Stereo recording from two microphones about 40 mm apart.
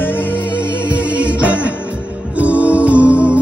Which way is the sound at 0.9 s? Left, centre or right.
Right.